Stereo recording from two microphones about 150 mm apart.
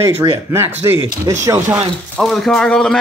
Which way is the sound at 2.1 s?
Centre (ahead or behind).